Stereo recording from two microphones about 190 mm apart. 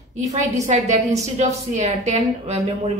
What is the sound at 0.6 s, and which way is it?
A woman's voice, 40° right (ahead or behind).